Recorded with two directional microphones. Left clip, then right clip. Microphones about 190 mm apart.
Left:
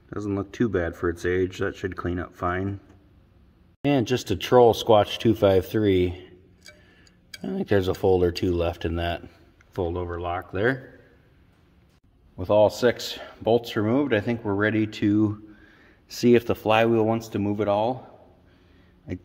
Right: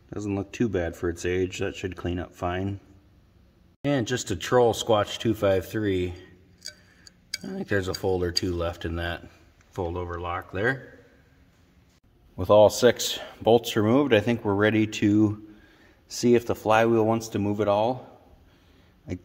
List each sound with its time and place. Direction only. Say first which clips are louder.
0.1 s speech: left 2 dB; 5° right (ahead or behind)
3.8 s speech: left 3 dB; 15° left (ahead or behind)
7.4 s speech: left 5 dB; 20° left (ahead or behind)
12.4 s speech: right 2 dB; 25° right (ahead or behind)
15.8 s speech: left 2 dB; 10° left (ahead or behind); by 17.9 s 10° right (ahead or behind)
19.1 s speech: left 1 dB; centre (ahead or behind)